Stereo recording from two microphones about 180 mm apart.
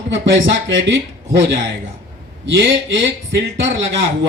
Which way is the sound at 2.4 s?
90° right.